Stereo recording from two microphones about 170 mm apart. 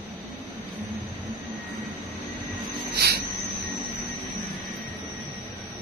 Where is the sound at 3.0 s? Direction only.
70° right (ahead or behind).